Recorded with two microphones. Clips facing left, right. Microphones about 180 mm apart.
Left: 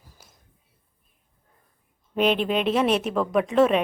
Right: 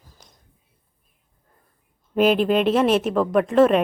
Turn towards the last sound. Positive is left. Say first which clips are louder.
# right 3 dB
turn(degrees=0)  # may be behind; listen again after turning